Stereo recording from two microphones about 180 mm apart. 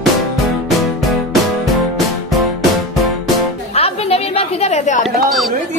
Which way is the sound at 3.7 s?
35° left (ahead or behind).